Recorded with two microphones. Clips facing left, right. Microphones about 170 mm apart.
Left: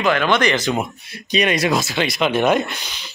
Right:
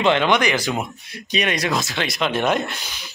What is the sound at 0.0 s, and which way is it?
Speech, 25° right (ahead or behind).